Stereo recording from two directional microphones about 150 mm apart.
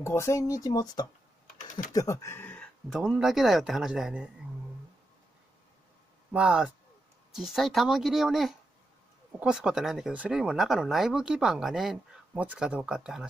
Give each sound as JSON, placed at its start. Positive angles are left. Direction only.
{"t": 0.0, "sound": "speech", "side_deg": 20}
{"t": 2.9, "sound": "speech", "side_deg": -5}
{"t": 6.3, "sound": "a man's voice", "side_deg": -5}